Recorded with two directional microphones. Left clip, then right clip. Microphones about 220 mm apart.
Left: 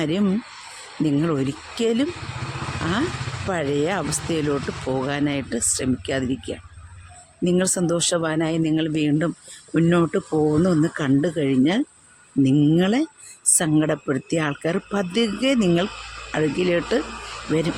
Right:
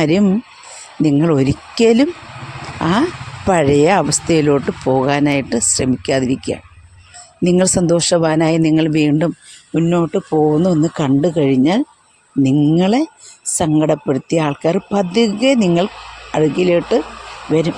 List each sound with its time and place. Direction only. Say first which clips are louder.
0.0 s speech: right 8 dB; 30° right (ahead or behind)
9.7 s speech: right 4 dB; 10° right (ahead or behind)